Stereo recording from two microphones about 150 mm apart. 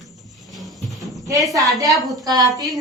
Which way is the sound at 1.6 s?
20° right (ahead or behind).